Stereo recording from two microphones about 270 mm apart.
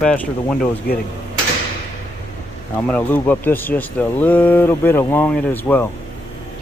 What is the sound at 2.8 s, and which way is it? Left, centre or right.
Speech, centre.